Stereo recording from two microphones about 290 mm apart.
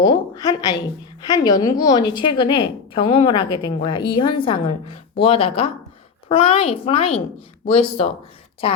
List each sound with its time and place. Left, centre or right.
0.0 s a woman's voice: centre